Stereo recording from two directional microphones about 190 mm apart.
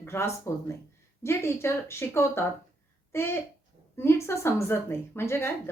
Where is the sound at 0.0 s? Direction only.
15° left (ahead or behind).